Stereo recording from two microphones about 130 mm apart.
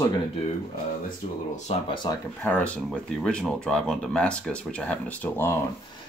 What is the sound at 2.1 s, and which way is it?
Speech, 30° left (ahead or behind).